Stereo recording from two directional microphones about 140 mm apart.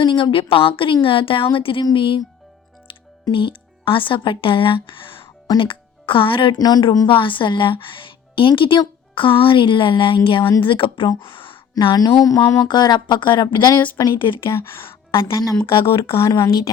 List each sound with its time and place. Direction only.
0.0 s a woman's voice: 35° left (ahead or behind)
3.2 s a woman's voice: 40° left (ahead or behind)
11.2 s a sound: 35° left (ahead or behind)
11.7 s a woman's voice: 30° left (ahead or behind)
14.5 s speech: 15° left (ahead or behind)
15.6 s a woman's voice: 40° left (ahead or behind)
16.1 s speech: 20° left (ahead or behind)